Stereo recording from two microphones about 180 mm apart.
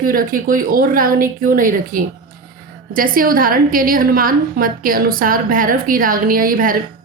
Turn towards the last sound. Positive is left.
turn(degrees=-50)  # may be behind; listen again after turning